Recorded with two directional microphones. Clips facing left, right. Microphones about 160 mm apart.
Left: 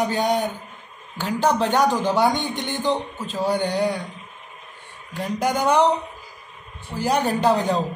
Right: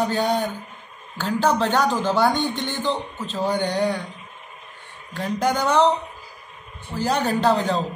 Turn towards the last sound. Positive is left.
turn(degrees=15)  # may be behind; listen again after turning